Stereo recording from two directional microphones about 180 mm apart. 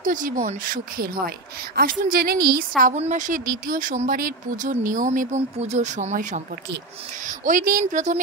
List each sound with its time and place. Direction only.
0.0 s a woman's voice: 50° right (ahead or behind)
0.9 s a woman's voice: 55° right (ahead or behind)
2.8 s a woman's voice: 40° right (ahead or behind)